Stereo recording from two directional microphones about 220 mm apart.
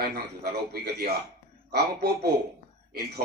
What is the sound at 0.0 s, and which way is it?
Speech, 45° right (ahead or behind).